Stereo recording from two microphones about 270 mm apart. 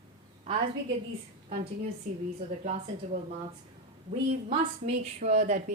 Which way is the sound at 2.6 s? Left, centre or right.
Right.